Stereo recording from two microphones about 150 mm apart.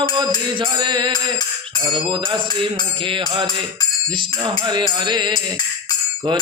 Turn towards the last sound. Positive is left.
turn(degrees=-30)  # may be behind; listen again after turning